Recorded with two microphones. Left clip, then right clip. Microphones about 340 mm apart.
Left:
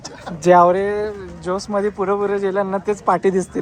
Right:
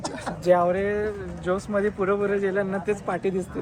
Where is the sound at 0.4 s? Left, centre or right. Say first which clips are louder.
Left 8 dB; left.